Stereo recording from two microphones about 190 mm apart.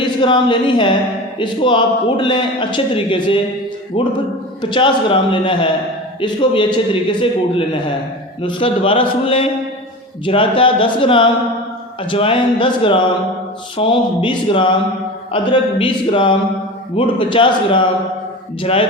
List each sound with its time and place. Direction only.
0.0 s a man's voice: 25° left (ahead or behind)